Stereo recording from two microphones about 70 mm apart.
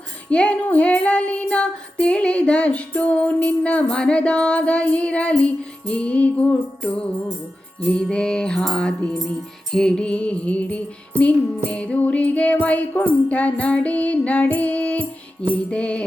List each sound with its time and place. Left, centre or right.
0.3 s child singing: centre
7.8 s music: centre
8.1 s child singing: centre
11.2 s music: centre
15.7 s child singing: centre